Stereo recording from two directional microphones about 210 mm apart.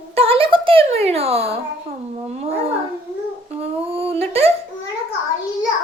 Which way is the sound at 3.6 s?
30° right (ahead or behind).